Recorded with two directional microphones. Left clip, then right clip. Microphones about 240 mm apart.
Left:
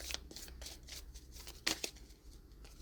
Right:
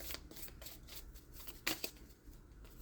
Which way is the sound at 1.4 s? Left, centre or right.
Centre.